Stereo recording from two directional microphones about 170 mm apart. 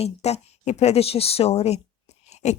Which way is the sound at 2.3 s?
40° left (ahead or behind).